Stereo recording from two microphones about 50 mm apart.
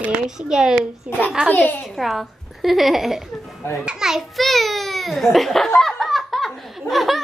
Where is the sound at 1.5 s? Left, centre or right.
Left.